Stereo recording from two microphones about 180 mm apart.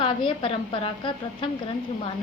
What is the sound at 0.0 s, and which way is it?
A woman's voice, 30° left (ahead or behind).